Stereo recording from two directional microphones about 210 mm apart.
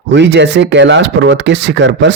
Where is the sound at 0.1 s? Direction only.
55° right (ahead or behind).